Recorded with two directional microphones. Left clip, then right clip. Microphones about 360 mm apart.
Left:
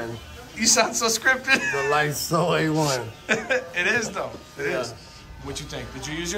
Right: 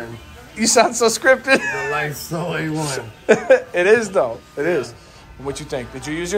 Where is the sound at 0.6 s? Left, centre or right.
Centre.